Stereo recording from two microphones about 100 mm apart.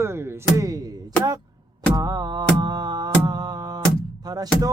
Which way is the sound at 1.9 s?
40° right (ahead or behind).